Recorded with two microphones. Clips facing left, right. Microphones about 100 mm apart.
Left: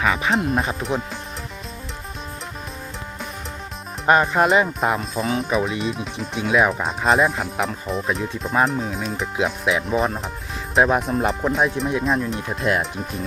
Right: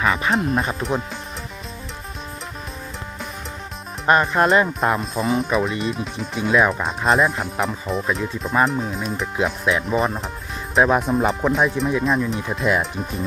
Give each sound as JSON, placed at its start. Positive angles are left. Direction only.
{"t": 0.0, "sound": "speech", "side_deg": 0}
{"t": 4.0, "sound": "speech", "side_deg": 20}
{"t": 4.4, "sound": "speech", "side_deg": 5}